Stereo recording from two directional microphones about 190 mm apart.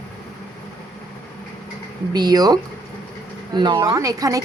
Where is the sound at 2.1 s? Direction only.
20° right (ahead or behind).